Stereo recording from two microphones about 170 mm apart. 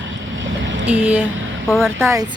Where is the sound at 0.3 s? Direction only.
90° right.